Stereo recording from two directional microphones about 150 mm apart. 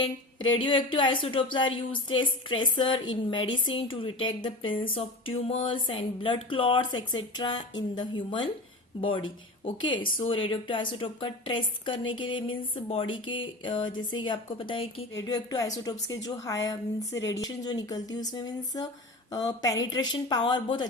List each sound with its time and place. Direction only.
0.5 s a woman's voice: 35° left (ahead or behind)
15.1 s a woman's voice: 25° left (ahead or behind)